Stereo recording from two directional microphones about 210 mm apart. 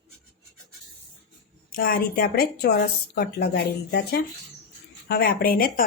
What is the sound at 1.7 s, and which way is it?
A woman's voice, 45° left (ahead or behind).